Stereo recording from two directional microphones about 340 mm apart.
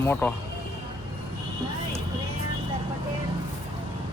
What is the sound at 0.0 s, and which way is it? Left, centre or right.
Speech, centre.